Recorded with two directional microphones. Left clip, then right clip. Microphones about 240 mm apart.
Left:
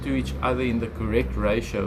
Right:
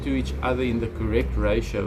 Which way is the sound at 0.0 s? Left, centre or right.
Centre.